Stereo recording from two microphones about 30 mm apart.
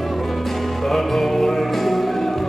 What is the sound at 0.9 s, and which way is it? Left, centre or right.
Music, centre.